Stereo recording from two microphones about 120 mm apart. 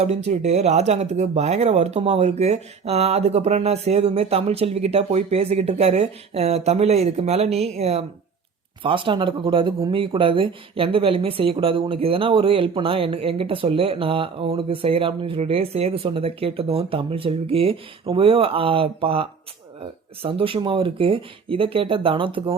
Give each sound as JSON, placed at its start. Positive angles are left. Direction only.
{"t": 0.0, "sound": "speech", "side_deg": -60}
{"t": 8.8, "sound": "speech", "side_deg": -45}